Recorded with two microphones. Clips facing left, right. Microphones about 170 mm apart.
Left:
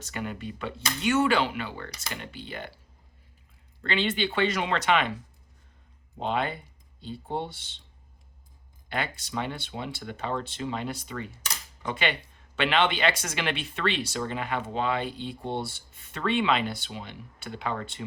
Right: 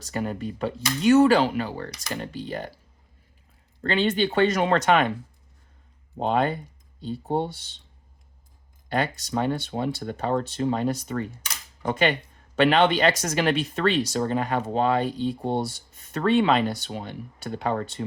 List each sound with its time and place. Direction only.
0.0 s speech: 40° right (ahead or behind)
3.8 s speech: 45° right (ahead or behind)
6.1 s speech: 45° right (ahead or behind)
8.9 s speech: 40° right (ahead or behind)